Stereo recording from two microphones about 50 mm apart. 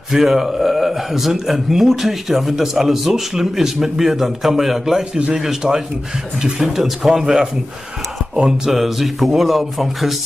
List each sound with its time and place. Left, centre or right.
0.1 s speech: centre
8.4 s speech: centre
8.7 s speech: centre